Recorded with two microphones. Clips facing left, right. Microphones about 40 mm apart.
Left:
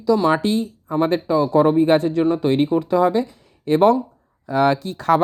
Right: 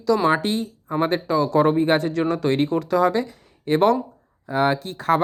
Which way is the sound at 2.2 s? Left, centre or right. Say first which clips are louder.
Left 3 dB; right.